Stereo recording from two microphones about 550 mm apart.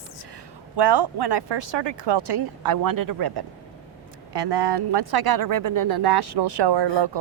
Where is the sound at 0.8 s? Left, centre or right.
Right.